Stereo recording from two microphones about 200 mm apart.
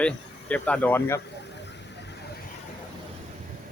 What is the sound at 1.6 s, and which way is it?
Vehicle, 60° left (ahead or behind).